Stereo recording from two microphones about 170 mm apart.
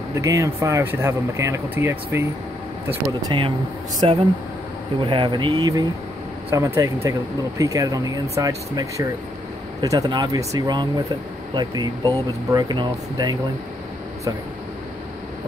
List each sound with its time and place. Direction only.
0.1 s speech: 20° right (ahead or behind)
3.3 s speech: 30° right (ahead or behind)